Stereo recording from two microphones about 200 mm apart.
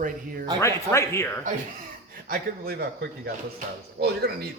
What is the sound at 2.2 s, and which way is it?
Speech, 50° right (ahead or behind).